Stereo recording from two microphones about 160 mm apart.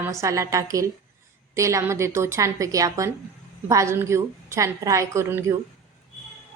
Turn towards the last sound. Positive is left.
turn(degrees=-15)  # may be behind; listen again after turning